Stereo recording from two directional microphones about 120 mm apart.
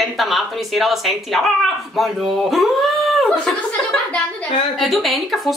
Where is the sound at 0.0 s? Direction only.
Centre (ahead or behind).